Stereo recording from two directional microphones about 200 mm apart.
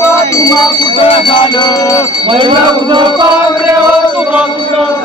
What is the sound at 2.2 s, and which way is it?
Speech, 25° right (ahead or behind).